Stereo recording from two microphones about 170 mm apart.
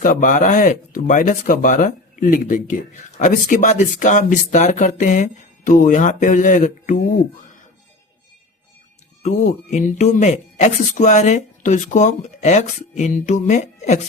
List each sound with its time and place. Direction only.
0.0 s speech: 50° left (ahead or behind)
9.2 s speech: 45° left (ahead or behind)